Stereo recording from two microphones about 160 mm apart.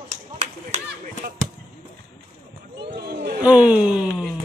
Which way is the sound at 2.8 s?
85° right.